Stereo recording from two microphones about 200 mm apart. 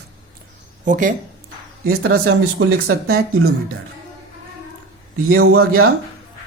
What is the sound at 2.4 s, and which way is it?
Speech, 90° right.